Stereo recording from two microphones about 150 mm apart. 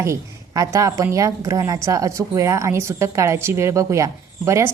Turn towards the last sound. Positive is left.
turn(degrees=-20)  # may be behind; listen again after turning